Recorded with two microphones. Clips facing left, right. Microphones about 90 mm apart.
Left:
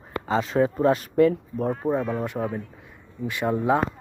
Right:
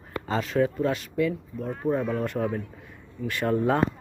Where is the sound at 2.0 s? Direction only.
10° left (ahead or behind).